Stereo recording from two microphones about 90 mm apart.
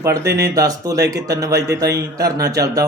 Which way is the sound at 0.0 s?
35° right (ahead or behind).